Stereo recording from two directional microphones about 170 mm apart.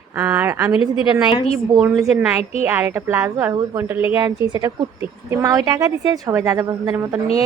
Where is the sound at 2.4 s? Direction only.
40° left (ahead or behind).